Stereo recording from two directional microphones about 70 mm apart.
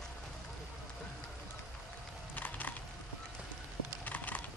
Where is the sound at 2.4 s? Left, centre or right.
Left.